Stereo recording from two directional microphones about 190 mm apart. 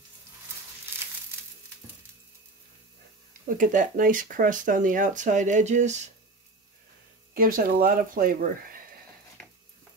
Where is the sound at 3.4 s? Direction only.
45° right (ahead or behind).